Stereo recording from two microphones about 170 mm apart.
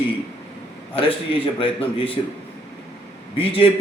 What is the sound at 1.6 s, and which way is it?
Speech, 30° left (ahead or behind).